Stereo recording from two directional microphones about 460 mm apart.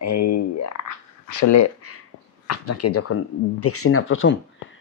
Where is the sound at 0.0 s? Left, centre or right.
Left.